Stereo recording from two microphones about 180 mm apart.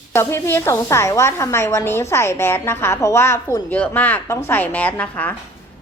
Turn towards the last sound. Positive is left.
turn(degrees=10)  # may be behind; listen again after turning